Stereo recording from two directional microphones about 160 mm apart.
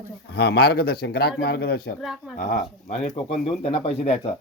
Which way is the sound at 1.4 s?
90° left.